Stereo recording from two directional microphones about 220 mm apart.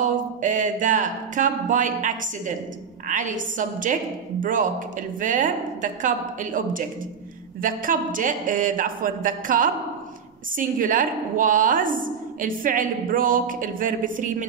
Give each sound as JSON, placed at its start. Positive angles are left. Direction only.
{"t": 0.0, "sound": "a woman's voice", "side_deg": -35}